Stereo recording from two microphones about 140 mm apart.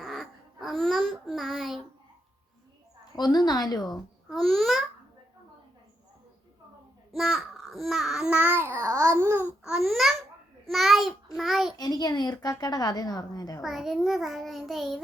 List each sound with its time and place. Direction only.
0.0 s a sound: centre (ahead or behind)
3.2 s a woman's voice: 30° left (ahead or behind)
3.9 s a child's voice: centre (ahead or behind)
7.1 s speech: centre (ahead or behind); by 9.5 s 15° right (ahead or behind)
9.6 s a child's voice: centre (ahead or behind)
11.8 s a woman's voice: 30° left (ahead or behind)
13.6 s a child's voice: centre (ahead or behind)